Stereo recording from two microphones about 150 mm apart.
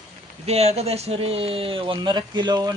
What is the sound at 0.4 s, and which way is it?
Speech, 45° right (ahead or behind).